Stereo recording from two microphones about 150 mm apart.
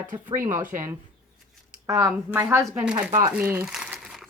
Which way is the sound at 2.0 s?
15° right (ahead or behind).